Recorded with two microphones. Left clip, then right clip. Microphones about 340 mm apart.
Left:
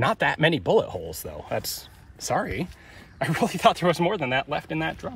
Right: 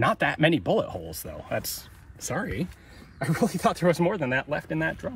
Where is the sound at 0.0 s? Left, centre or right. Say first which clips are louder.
Left 1 dB; left.